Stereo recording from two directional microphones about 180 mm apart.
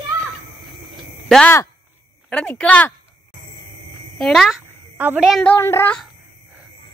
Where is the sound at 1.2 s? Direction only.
5° left (ahead or behind).